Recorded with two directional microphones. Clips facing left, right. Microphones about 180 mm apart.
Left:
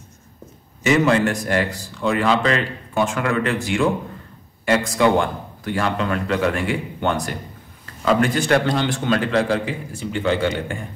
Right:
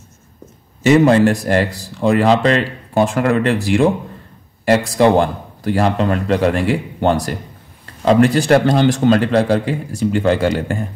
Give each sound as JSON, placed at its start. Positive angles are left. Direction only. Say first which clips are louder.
{"t": 0.8, "sound": "a man's voice", "louder": "right 6 dB", "side_deg": -35}